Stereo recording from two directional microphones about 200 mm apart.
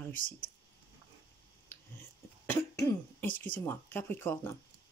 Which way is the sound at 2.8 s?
10° left (ahead or behind).